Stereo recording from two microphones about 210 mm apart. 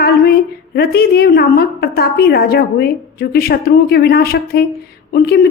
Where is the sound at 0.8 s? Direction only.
50° left (ahead or behind).